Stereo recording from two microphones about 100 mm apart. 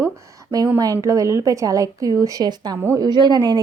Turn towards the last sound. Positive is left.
turn(degrees=-40)  # may be behind; listen again after turning